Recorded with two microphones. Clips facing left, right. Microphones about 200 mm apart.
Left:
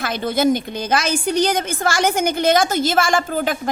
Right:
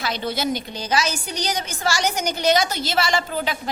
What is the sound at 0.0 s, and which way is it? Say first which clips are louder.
A woman's voice: left 6 dB; 50° left (ahead or behind).